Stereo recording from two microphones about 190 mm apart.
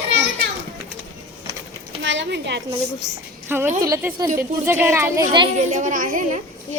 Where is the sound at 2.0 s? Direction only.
70° right (ahead or behind).